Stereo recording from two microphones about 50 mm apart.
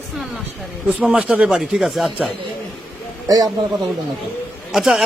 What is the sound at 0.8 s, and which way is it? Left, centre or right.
Speech, centre.